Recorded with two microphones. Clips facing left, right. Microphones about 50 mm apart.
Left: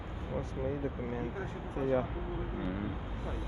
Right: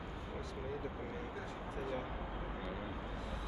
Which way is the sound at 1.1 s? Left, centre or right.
Left.